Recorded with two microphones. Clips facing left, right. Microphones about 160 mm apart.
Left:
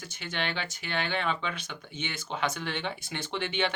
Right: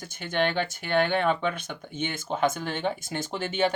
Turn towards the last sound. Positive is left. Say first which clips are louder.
# right 4 dB
turn(degrees=-45)  # may be behind; listen again after turning